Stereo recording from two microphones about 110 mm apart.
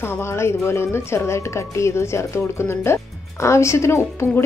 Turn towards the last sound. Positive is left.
turn(degrees=25)  # may be behind; listen again after turning